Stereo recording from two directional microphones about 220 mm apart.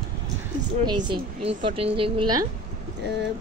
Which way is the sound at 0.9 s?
20° right (ahead or behind).